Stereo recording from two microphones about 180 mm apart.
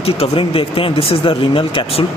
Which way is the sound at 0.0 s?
30° left (ahead or behind).